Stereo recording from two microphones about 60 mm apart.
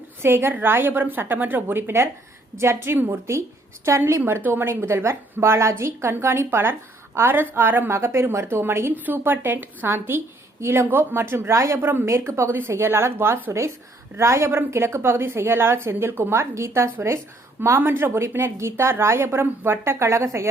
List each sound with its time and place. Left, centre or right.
0.2 s a woman's voice: right
4.4 s a woman's voice: right
9.0 s a woman's voice: right
11.8 s a woman's voice: right
14.2 s a woman's voice: right
17.7 s a woman's voice: right